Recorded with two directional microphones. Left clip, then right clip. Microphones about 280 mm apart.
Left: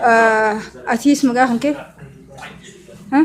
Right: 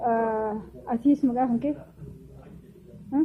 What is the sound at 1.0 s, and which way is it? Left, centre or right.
Speech, centre.